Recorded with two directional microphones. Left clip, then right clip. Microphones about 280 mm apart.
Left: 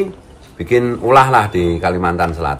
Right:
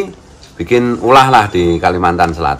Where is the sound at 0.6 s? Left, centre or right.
Centre.